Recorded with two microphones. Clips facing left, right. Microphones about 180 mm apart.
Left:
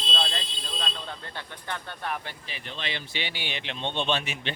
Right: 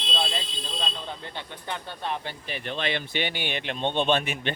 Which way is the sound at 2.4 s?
55° right (ahead or behind).